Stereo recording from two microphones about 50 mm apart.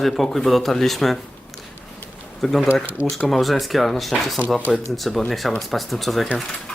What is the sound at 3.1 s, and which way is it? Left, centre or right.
Speech, centre.